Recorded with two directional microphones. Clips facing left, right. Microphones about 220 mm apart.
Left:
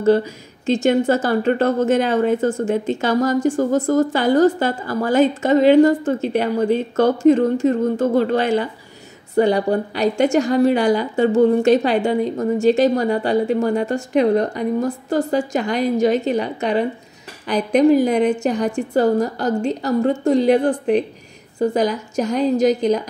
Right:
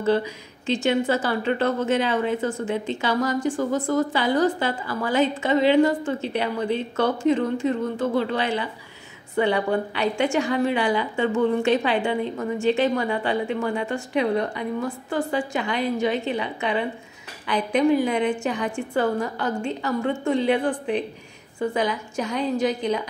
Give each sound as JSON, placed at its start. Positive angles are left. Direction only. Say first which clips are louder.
{"t": 0.0, "sound": "a woman's voice", "louder": "left 6 dB", "side_deg": 45}